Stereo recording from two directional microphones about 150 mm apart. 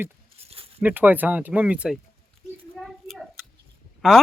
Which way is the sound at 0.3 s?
40° right (ahead or behind).